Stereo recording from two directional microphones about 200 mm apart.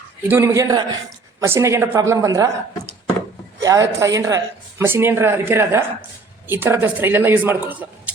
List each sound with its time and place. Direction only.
0.3 s speech: 15° right (ahead or behind)
3.6 s speech: 15° right (ahead or behind)